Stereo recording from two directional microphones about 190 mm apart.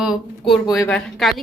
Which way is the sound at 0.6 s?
20° left (ahead or behind).